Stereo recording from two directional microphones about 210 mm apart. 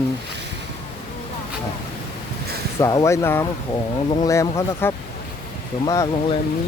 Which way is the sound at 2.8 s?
15° left (ahead or behind).